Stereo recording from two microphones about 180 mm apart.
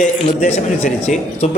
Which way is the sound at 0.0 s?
40° left (ahead or behind).